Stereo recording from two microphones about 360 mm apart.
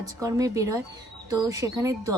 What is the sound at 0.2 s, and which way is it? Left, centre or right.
Speech, centre.